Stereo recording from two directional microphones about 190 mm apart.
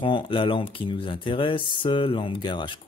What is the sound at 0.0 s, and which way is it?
Speech, 25° left (ahead or behind).